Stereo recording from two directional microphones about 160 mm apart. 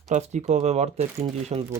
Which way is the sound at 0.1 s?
50° right (ahead or behind).